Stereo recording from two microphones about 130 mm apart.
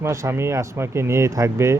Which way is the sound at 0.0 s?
20° right (ahead or behind).